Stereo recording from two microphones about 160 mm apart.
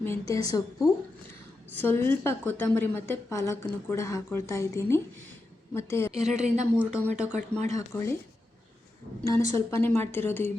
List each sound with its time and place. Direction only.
0.0 s a woman's voice: 15° left (ahead or behind)
1.7 s a woman's voice: 10° left (ahead or behind)
6.1 s speech: 40° right (ahead or behind)
6.7 s speech: 10° right (ahead or behind)
7.7 s a woman's voice: 20° left (ahead or behind)
9.2 s a woman's voice: 20° left (ahead or behind)